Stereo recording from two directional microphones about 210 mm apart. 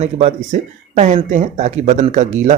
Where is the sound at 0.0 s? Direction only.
30° right (ahead or behind).